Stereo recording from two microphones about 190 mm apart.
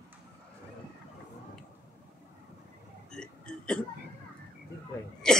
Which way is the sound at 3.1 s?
5° left (ahead or behind).